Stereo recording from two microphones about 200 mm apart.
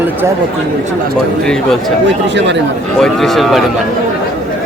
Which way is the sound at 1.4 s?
5° left (ahead or behind).